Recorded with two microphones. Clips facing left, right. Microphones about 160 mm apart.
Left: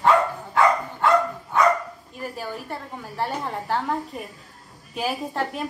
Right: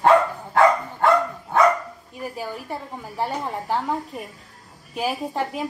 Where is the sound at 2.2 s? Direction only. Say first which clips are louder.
Right 1 dB; 10° right (ahead or behind).